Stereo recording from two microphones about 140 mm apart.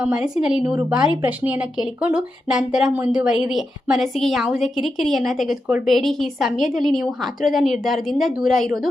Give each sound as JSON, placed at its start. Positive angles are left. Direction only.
{"t": 0.0, "sound": "a woman's voice", "side_deg": -5}
{"t": 0.6, "sound": "a woman's voice", "side_deg": -20}